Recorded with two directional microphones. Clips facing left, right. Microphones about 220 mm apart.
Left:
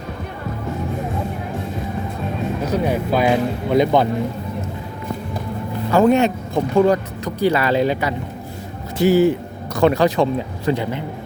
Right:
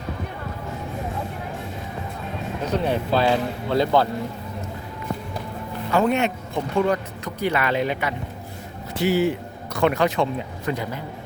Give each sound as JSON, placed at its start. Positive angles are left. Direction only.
{"t": 2.6, "sound": "speech", "side_deg": 10}
{"t": 5.9, "sound": "speech", "side_deg": 40}
{"t": 9.0, "sound": "a man's voice", "side_deg": 45}